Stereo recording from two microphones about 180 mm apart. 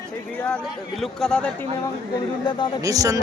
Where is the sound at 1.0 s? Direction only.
Centre (ahead or behind).